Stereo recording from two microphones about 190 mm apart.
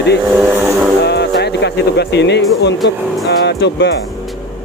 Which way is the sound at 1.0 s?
60° left (ahead or behind).